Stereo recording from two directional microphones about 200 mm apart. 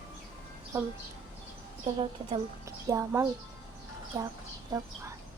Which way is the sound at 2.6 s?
15° right (ahead or behind).